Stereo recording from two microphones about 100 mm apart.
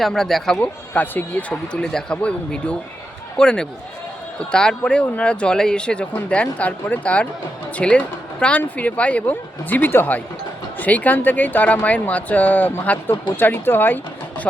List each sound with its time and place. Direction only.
0.0 s speech: 5° left (ahead or behind)
0.6 s speech: 15° left (ahead or behind)